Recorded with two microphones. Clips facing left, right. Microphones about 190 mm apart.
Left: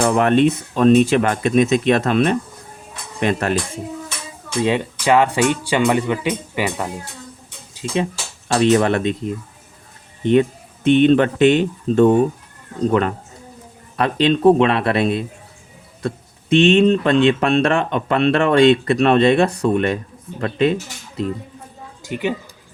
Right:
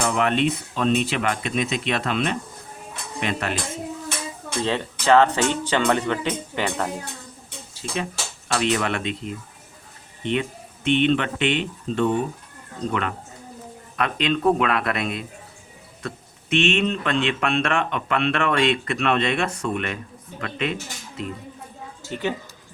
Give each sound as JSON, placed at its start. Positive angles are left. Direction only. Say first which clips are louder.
{"t": 0.0, "sound": "speech", "louder": "left 7 dB", "side_deg": 45}
{"t": 4.6, "sound": "speech", "louder": "left 5 dB", "side_deg": 15}
{"t": 7.7, "sound": "a sound", "louder": "left 7 dB", "side_deg": 20}
{"t": 8.4, "sound": "speech", "louder": "left 8 dB", "side_deg": 35}
{"t": 10.8, "sound": "speech", "louder": "left 7 dB", "side_deg": 40}
{"t": 22.0, "sound": "speech", "louder": "left 4 dB", "side_deg": 10}